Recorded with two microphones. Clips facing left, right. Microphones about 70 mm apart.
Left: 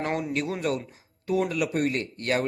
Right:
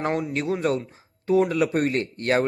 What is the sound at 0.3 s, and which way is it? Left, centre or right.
Speech, right.